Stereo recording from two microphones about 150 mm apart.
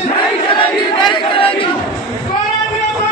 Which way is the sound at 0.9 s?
30° left (ahead or behind).